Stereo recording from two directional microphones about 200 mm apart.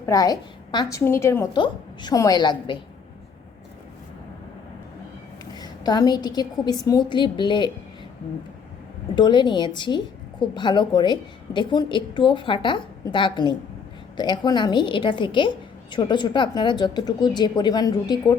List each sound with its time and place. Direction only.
0.0 s a woman's voice: 15° left (ahead or behind)
5.5 s a woman's voice: 20° left (ahead or behind)
9.1 s a woman's voice: 20° left (ahead or behind)